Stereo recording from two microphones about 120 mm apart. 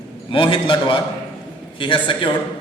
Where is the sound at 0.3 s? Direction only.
50° left (ahead or behind).